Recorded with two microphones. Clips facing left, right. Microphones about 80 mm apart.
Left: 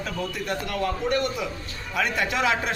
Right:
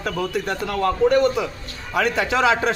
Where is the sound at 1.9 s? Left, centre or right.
Right.